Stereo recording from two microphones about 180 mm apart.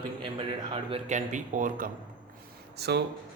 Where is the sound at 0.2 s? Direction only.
30° right (ahead or behind); by 1.9 s 45° right (ahead or behind).